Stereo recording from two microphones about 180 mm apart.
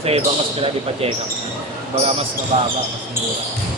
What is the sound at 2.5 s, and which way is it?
Speech, 35° right (ahead or behind).